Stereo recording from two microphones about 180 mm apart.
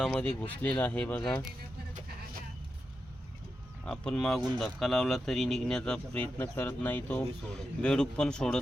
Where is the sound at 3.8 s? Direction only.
5° left (ahead or behind).